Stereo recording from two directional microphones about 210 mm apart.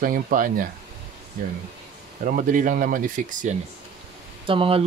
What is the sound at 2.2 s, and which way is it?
Speech, 40° right (ahead or behind).